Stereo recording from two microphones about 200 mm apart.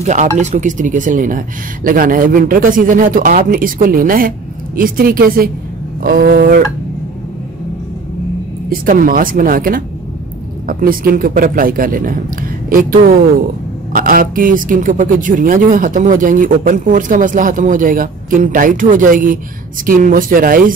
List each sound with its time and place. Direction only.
0.0 s a woman's voice: 35° right (ahead or behind); by 6.6 s 55° right (ahead or behind)
8.6 s a woman's voice: 45° right (ahead or behind)